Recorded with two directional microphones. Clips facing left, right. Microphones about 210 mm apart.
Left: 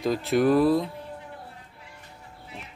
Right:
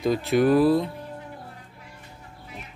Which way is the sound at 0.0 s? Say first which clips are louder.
Right 2 dB; centre (ahead or behind).